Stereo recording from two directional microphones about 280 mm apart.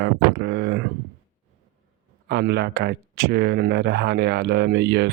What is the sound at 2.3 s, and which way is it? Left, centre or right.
Speech, right.